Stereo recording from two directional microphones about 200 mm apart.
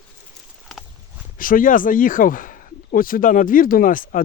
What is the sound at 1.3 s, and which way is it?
Speech, 45° left (ahead or behind).